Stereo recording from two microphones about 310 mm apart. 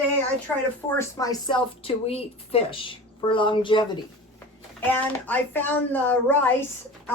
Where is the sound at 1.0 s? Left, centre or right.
Centre.